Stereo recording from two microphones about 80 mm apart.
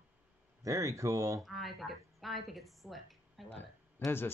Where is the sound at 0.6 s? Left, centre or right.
Right.